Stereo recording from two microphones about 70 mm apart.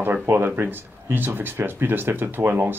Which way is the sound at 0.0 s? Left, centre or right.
Right.